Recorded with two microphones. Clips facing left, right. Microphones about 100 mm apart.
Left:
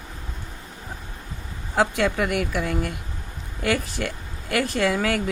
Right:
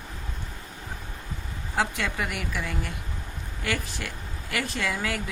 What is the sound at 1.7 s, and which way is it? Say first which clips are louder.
Speech: left 7 dB; 55° left (ahead or behind).